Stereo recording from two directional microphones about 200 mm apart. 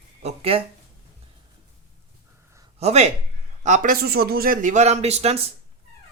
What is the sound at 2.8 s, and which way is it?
A man's voice, 30° right (ahead or behind).